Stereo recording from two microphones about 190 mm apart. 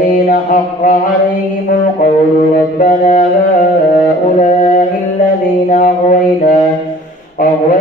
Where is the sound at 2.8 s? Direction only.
45° left (ahead or behind).